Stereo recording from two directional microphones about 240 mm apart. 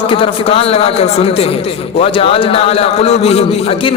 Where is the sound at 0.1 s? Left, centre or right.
Left.